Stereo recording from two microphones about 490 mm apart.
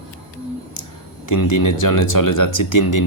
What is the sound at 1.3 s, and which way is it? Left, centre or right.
Speech, left.